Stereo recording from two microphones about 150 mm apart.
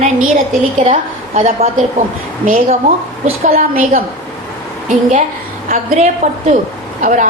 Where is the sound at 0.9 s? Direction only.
45° right (ahead or behind).